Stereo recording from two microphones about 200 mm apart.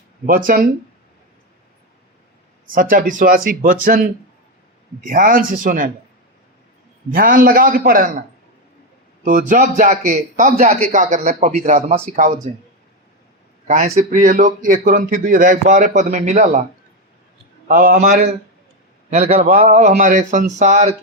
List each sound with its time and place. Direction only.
0.3 s speech: 45° right (ahead or behind)
2.7 s speech: 45° right (ahead or behind)
7.1 s speech: 45° right (ahead or behind)
9.2 s speech: 40° right (ahead or behind)
13.7 s speech: 40° right (ahead or behind)
17.7 s speech: 45° right (ahead or behind)